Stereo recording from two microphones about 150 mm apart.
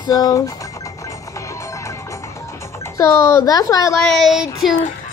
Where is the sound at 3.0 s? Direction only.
20° left (ahead or behind).